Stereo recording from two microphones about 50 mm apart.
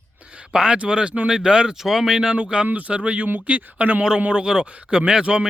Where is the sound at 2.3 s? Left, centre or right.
Right.